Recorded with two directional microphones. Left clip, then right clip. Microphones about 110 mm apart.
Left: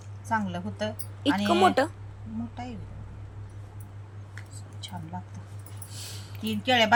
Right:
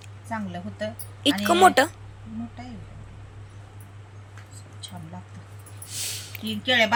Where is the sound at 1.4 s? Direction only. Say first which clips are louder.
Right 5 dB; 5° right (ahead or behind).